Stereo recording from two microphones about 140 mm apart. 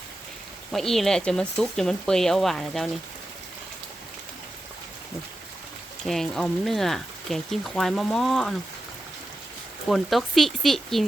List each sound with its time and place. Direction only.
0.7 s speech: centre (ahead or behind)
6.1 s speech: 5° left (ahead or behind)
9.9 s speech: centre (ahead or behind)